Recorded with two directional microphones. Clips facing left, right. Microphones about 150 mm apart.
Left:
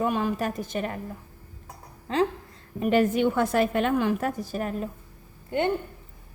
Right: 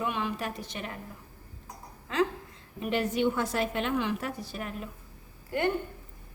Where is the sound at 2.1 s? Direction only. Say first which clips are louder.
Left 3 dB; 35° left (ahead or behind).